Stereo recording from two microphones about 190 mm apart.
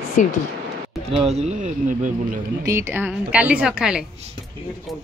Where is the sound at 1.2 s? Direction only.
35° right (ahead or behind).